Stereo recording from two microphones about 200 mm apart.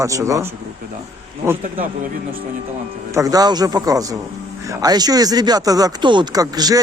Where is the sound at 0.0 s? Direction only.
15° right (ahead or behind).